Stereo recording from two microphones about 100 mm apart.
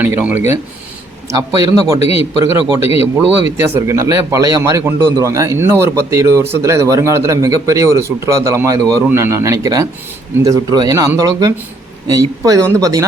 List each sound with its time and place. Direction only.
0.0 s a man's voice: 15° right (ahead or behind)
1.3 s a man's voice: 35° right (ahead or behind)